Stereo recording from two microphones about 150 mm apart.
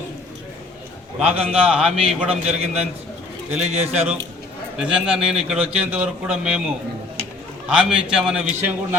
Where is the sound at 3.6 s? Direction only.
45° right (ahead or behind).